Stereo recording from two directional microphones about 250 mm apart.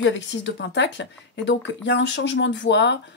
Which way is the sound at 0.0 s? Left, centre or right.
Left.